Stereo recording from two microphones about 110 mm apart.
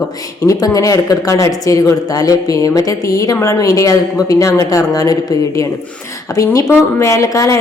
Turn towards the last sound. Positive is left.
turn(degrees=30)  # may be behind; listen again after turning